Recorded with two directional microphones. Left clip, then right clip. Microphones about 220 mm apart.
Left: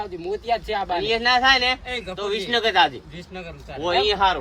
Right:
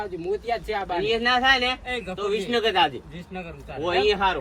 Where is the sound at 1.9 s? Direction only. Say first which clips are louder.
Even; 5° left (ahead or behind).